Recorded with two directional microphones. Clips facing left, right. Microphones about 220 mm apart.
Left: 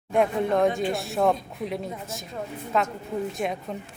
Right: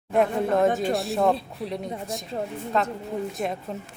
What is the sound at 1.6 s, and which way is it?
Speech, 35° right (ahead or behind).